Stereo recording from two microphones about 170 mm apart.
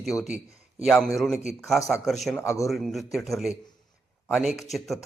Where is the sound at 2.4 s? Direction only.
15° left (ahead or behind).